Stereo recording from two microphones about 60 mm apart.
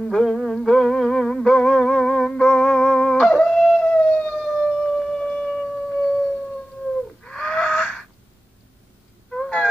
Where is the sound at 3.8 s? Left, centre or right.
Centre.